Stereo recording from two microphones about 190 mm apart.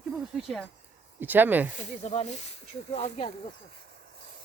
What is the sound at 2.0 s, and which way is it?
Speech, 35° left (ahead or behind).